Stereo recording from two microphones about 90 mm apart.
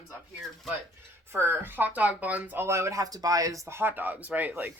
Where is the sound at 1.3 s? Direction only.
25° right (ahead or behind).